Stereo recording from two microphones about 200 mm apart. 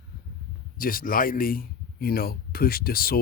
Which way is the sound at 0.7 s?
45° left (ahead or behind).